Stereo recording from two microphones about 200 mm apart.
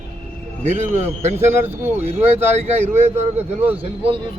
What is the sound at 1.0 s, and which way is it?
Speech, 35° right (ahead or behind).